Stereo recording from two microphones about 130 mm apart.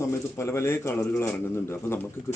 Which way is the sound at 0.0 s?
20° left (ahead or behind).